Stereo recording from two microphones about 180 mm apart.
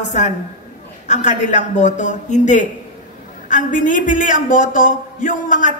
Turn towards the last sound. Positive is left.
turn(degrees=45)  # may be behind; listen again after turning